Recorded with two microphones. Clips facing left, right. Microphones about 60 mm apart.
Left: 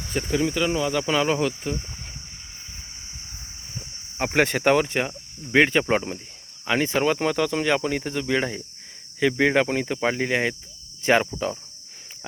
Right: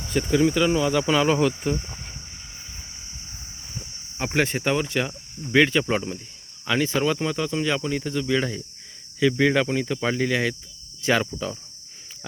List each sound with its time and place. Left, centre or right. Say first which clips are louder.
0.1 s speech: right 4 dB; centre
4.2 s speech: left 3 dB; left
5.5 s speech: left 1 dB; left
11.0 s cricket: left 2 dB; left